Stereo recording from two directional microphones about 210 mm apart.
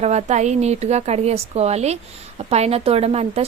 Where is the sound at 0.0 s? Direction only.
30° right (ahead or behind).